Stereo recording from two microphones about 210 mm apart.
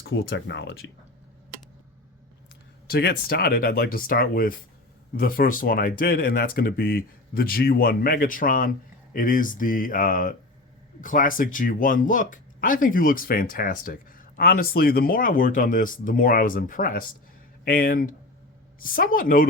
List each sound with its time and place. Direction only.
0.1 s speech: 55° left (ahead or behind)
2.9 s speech: 45° left (ahead or behind)